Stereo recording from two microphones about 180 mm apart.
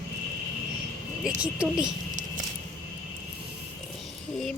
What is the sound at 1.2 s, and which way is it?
Speech, 5° right (ahead or behind).